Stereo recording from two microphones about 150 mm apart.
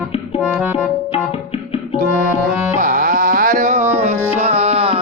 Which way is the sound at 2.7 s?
60° right (ahead or behind).